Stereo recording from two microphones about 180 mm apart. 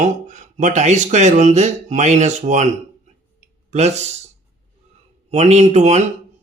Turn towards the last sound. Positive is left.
turn(degrees=-40)  # may be behind; listen again after turning